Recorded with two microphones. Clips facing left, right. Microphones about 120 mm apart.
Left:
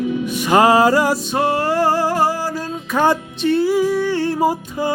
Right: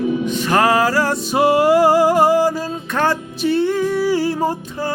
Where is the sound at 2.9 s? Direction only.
10° left (ahead or behind).